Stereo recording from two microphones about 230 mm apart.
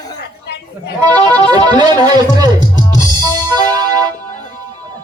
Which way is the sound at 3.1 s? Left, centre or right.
Centre.